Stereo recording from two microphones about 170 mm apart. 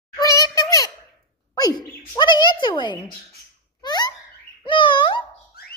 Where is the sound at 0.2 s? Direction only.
20° left (ahead or behind).